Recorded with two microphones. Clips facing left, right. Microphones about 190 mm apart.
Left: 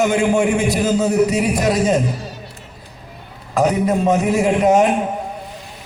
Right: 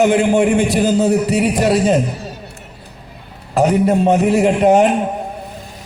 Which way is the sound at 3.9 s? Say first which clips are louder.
Right 3 dB; 30° right (ahead or behind).